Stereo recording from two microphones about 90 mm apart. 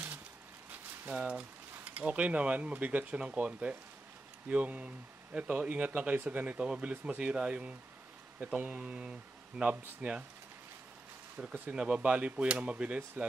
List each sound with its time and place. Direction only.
0.7 s a sound: 15° right (ahead or behind)
1.9 s speech: 15° right (ahead or behind)
11.3 s speech: 20° right (ahead or behind)